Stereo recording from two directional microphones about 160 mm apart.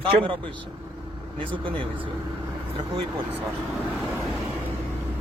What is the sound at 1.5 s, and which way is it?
Speech, 30° right (ahead or behind).